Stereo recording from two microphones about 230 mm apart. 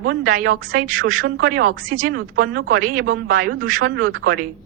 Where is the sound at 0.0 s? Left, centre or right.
Right.